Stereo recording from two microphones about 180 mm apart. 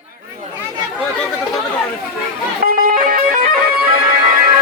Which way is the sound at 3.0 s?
50° right (ahead or behind).